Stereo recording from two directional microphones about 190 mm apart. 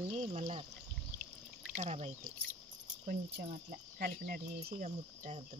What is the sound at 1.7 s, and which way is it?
Speech, 35° right (ahead or behind).